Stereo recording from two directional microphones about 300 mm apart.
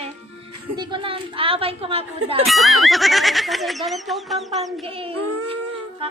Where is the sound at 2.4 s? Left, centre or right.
Centre.